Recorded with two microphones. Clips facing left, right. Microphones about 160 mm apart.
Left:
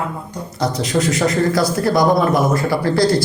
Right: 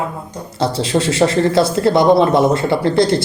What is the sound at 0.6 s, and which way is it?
A man's voice, 30° right (ahead or behind).